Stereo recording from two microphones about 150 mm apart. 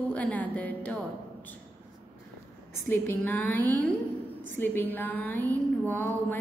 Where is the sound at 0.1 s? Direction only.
10° left (ahead or behind).